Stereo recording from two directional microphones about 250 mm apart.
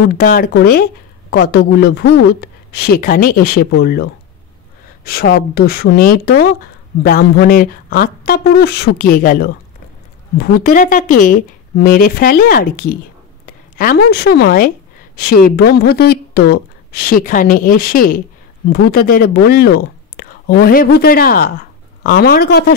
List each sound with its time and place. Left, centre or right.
0.2 s speech: left